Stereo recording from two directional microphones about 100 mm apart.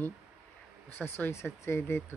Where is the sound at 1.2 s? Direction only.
25° left (ahead or behind).